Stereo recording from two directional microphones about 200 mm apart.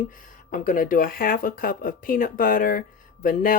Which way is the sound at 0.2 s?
40° left (ahead or behind).